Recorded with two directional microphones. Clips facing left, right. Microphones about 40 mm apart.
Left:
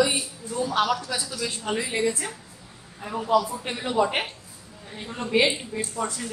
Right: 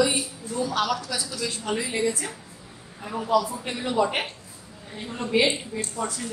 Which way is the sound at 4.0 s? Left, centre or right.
Centre.